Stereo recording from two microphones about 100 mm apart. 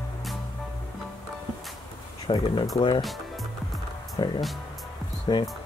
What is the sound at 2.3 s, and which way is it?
Speech, 70° left (ahead or behind).